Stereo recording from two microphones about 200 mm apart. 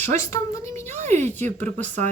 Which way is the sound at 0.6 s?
35° right (ahead or behind).